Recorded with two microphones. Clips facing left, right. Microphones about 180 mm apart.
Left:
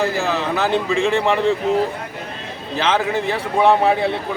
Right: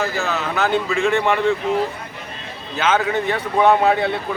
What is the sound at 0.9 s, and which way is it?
Speech, 30° left (ahead or behind).